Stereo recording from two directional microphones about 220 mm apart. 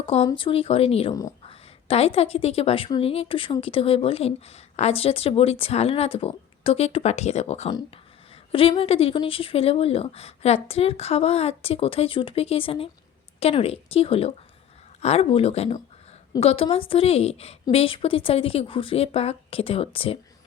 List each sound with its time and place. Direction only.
0.0 s speech: 25° left (ahead or behind)
1.1 s a sound: 15° left (ahead or behind)
1.9 s speech: 25° left (ahead or behind)